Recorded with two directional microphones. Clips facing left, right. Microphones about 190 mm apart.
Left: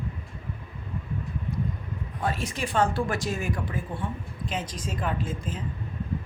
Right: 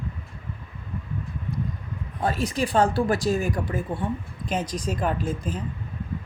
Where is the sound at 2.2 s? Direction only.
35° right (ahead or behind).